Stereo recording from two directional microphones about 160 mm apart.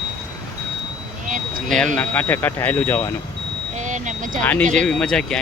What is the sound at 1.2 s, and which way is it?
Vehicle, 55° right (ahead or behind).